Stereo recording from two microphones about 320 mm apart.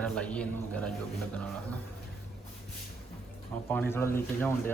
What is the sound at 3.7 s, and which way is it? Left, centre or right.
Speech, centre.